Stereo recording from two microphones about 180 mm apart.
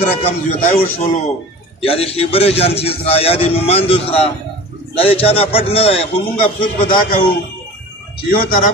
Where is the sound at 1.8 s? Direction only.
35° left (ahead or behind).